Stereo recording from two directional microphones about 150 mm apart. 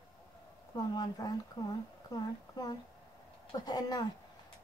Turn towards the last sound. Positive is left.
turn(degrees=25)  # may be behind; listen again after turning